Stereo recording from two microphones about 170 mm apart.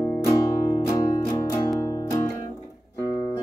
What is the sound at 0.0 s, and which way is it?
Music, 20° left (ahead or behind).